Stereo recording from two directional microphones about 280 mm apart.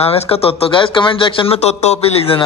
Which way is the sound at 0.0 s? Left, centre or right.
Left.